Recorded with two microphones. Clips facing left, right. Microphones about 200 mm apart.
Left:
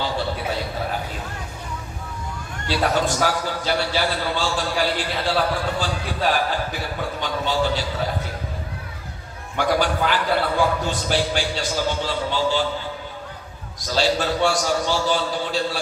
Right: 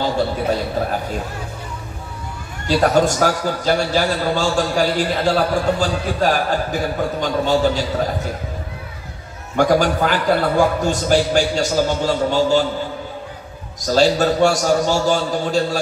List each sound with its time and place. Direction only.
2.7 s a man's voice: 45° right (ahead or behind)
9.6 s a man's voice: 45° right (ahead or behind)
13.7 s a man's voice: 45° right (ahead or behind)